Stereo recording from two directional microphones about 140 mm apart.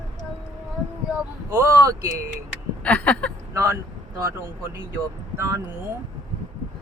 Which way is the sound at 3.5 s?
20° right (ahead or behind).